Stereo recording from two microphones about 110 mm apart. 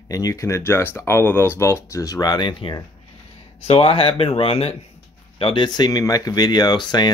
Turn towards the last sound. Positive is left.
turn(degrees=40)  # may be behind; listen again after turning